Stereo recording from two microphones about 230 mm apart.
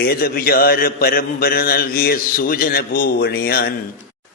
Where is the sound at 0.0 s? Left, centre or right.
Left.